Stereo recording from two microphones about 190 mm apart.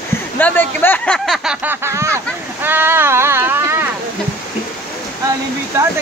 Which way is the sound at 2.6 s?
10° right (ahead or behind).